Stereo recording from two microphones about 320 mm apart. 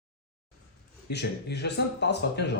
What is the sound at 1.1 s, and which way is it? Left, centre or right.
Speech, left.